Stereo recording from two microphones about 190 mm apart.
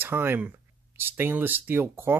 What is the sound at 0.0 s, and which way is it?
Speech, 10° right (ahead or behind).